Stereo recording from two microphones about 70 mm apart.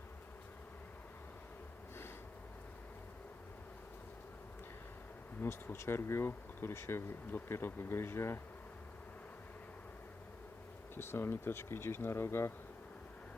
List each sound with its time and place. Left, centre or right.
5.4 s speech: left
10.9 s speech: left